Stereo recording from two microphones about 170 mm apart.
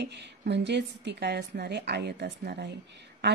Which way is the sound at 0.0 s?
90° right.